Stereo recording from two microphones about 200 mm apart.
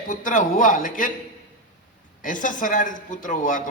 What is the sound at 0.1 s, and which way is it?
Speech, 40° left (ahead or behind).